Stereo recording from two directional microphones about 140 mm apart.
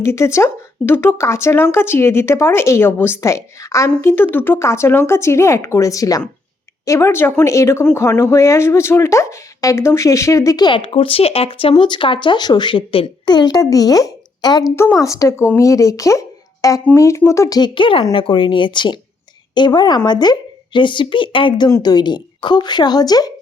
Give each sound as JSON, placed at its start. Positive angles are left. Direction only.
{"t": 0.0, "sound": "a woman's voice", "side_deg": 20}